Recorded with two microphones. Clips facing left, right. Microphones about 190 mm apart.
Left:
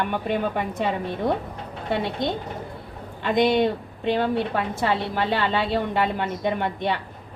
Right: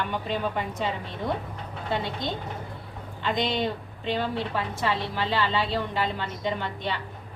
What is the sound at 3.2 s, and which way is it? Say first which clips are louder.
A woman's voice: left 7 dB; 60° left (ahead or behind).